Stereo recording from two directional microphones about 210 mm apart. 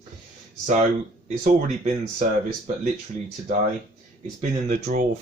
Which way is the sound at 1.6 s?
35° right (ahead or behind).